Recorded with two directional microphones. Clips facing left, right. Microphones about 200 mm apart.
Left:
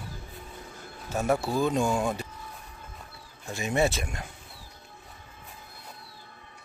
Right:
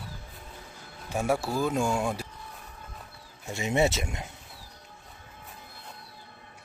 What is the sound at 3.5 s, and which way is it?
Speech, 25° right (ahead or behind).